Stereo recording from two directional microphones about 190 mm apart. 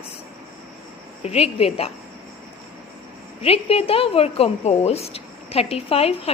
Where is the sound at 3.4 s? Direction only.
30° left (ahead or behind).